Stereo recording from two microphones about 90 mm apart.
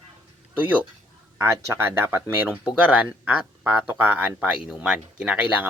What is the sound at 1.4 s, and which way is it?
Speech, 25° right (ahead or behind).